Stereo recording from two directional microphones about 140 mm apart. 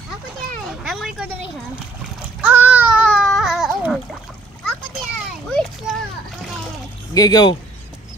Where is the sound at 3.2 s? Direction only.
Centre (ahead or behind).